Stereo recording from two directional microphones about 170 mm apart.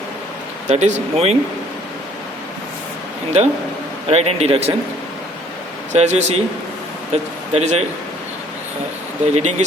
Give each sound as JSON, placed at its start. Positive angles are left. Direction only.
{"t": 0.7, "sound": "speech", "side_deg": -45}
{"t": 4.1, "sound": "speech", "side_deg": -40}
{"t": 5.9, "sound": "speech", "side_deg": -40}
{"t": 9.3, "sound": "speech", "side_deg": -45}